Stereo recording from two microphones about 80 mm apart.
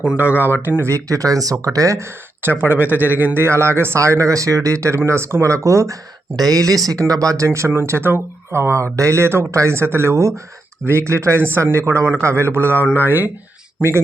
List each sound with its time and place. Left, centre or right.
0.0 s a man's voice: centre; by 2.0 s right
2.4 s a man's voice: right